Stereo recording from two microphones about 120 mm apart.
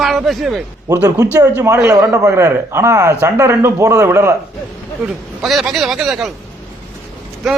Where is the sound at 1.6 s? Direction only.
20° right (ahead or behind).